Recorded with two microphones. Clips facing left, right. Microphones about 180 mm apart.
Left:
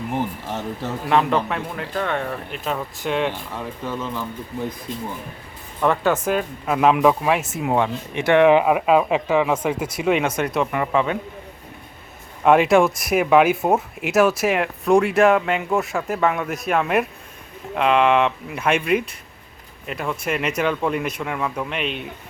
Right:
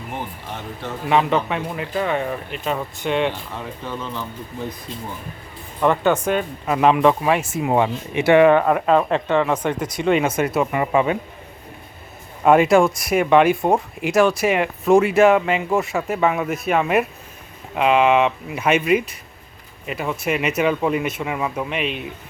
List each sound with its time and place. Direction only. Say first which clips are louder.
1.0 s speech: right 1 dB; centre (ahead or behind)
5.8 s speech: right 2 dB; centre (ahead or behind)
8.4 s speech: even; 10° left (ahead or behind); by 11.2 s 10° right (ahead or behind)
12.5 s speech: right 1 dB; centre (ahead or behind)